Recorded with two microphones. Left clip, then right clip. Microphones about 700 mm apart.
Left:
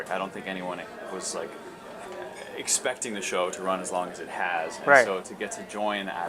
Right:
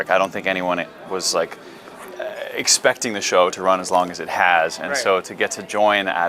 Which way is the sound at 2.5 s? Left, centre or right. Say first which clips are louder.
Right 12 dB; right.